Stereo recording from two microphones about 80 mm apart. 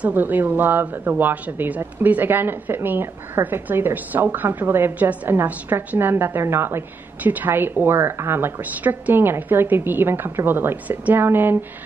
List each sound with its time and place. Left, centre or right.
0.0 s speech: right